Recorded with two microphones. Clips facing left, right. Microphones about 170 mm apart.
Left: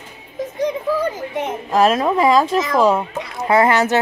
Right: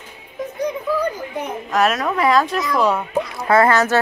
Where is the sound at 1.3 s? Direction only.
25° left (ahead or behind).